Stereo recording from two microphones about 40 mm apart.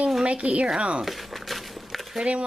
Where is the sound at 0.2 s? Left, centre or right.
Right.